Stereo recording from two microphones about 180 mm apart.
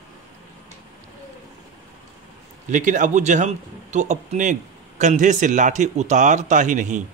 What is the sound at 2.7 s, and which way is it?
Speech, 45° right (ahead or behind).